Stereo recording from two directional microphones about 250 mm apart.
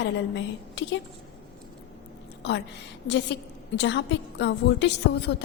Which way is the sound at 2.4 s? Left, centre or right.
Left.